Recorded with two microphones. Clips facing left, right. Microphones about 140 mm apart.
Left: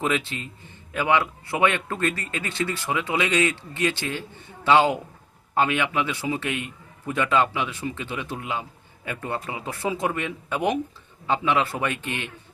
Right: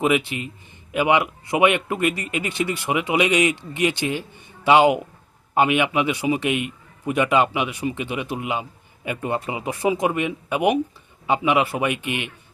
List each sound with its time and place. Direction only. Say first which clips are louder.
0.0 s speech: right 5 dB; 15° right (ahead or behind)